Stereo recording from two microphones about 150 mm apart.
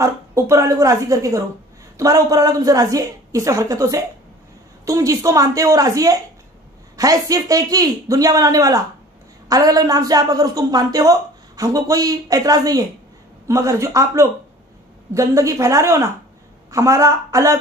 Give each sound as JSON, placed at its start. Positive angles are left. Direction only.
{"t": 0.0, "sound": "speech", "side_deg": -20}